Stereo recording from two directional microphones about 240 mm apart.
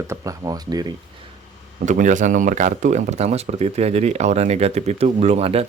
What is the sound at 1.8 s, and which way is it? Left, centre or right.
Speech, right.